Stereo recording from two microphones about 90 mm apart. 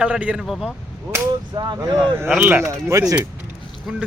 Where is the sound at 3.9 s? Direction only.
5° right (ahead or behind).